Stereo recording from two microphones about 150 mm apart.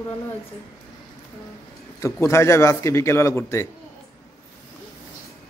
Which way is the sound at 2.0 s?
20° left (ahead or behind).